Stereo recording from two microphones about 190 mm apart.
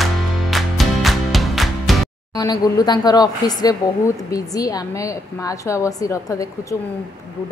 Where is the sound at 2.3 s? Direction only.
20° left (ahead or behind).